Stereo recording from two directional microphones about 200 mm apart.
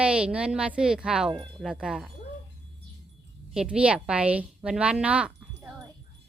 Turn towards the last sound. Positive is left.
turn(degrees=-5)  # may be behind; listen again after turning